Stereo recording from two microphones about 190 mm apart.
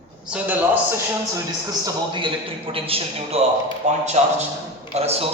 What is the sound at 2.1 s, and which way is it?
A man's voice, 25° right (ahead or behind).